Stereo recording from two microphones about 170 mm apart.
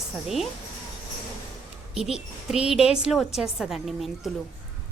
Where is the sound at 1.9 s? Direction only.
5° right (ahead or behind).